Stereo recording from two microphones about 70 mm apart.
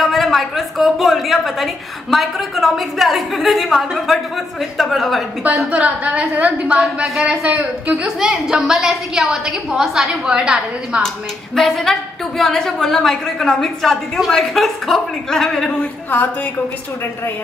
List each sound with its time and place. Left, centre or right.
0.0 s a woman's voice: centre
5.7 s a woman's voice: centre
11.5 s a woman's voice: centre